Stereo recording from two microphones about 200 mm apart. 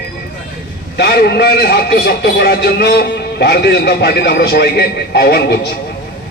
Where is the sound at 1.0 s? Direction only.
55° left (ahead or behind).